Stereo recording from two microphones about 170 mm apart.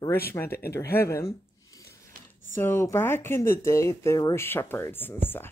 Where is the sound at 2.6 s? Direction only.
15° left (ahead or behind).